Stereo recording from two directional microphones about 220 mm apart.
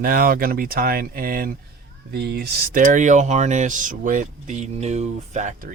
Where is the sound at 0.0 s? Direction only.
40° right (ahead or behind).